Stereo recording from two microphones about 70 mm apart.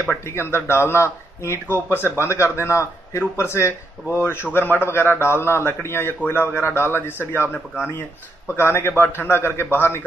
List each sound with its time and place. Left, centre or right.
0.2 s a man's voice: left
8.5 s a man's voice: left